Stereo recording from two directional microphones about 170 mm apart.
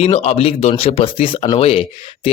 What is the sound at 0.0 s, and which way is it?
Speech, 40° left (ahead or behind).